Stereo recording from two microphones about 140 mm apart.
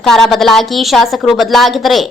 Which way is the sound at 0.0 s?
Centre (ahead or behind).